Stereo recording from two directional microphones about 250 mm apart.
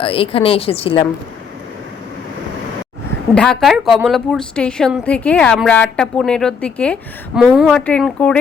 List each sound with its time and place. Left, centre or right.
0.0 s a woman's voice: left
3.3 s a woman's voice: centre